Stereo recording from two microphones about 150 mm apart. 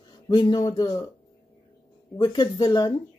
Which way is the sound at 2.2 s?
25° left (ahead or behind).